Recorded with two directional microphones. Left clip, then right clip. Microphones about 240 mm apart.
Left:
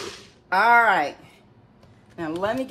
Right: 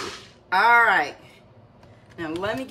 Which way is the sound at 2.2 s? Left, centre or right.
Centre.